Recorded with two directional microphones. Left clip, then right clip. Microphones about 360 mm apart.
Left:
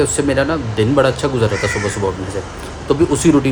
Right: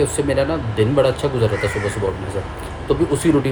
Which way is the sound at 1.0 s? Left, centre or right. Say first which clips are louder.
Left 3 dB; left.